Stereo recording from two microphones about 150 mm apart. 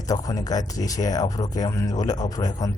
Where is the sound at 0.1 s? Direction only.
25° left (ahead or behind).